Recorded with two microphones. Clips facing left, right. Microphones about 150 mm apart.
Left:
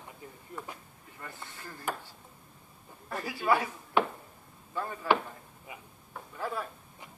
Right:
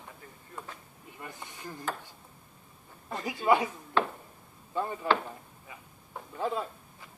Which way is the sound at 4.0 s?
15° left (ahead or behind).